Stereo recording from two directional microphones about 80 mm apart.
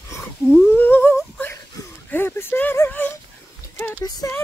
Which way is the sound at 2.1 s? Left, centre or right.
Left.